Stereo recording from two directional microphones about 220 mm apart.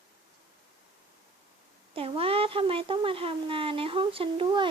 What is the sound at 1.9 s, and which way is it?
A child's voice, 25° right (ahead or behind).